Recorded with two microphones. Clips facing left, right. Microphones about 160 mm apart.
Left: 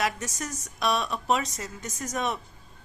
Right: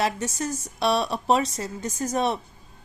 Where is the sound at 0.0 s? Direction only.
30° right (ahead or behind).